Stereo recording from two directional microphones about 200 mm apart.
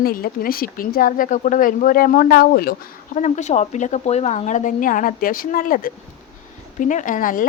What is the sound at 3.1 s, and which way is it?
Speech, 35° left (ahead or behind).